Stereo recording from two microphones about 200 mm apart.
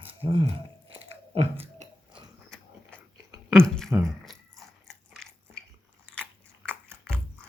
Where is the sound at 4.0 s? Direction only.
Centre (ahead or behind).